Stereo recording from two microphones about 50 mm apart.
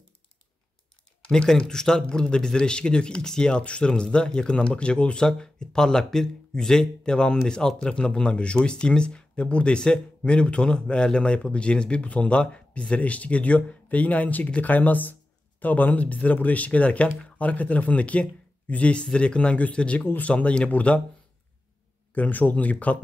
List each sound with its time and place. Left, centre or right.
1.3 s speech: centre
22.1 s speech: left